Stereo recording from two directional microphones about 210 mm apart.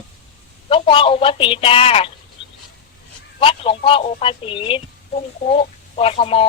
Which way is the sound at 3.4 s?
25° left (ahead or behind).